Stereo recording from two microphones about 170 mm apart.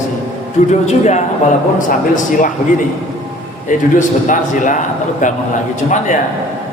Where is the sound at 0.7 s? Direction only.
40° left (ahead or behind).